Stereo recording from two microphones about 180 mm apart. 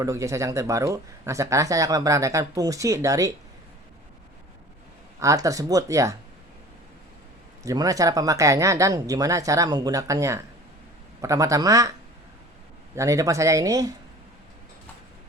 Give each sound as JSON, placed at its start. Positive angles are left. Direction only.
{"t": 0.0, "sound": "speech", "side_deg": -15}
{"t": 5.2, "sound": "speech", "side_deg": -20}
{"t": 7.6, "sound": "speech", "side_deg": -20}
{"t": 13.0, "sound": "speech", "side_deg": -15}